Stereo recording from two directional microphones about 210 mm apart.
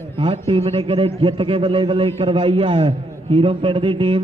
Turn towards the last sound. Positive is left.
turn(degrees=-25)  # may be behind; listen again after turning